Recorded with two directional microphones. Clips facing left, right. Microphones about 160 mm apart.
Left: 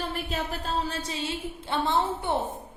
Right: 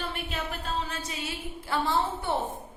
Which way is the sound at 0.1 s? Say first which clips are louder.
Left 3 dB; 35° left (ahead or behind).